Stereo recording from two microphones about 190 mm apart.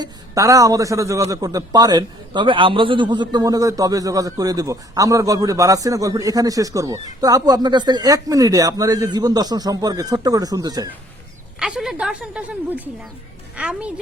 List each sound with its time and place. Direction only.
0.0 s a man's voice: 15° right (ahead or behind)
11.6 s a woman's voice: centre (ahead or behind)